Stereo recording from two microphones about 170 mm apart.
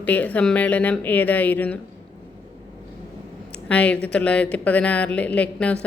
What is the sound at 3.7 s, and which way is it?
Speech, 5° left (ahead or behind).